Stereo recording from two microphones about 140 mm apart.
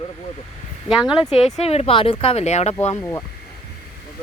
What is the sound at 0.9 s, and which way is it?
Speech, 5° right (ahead or behind).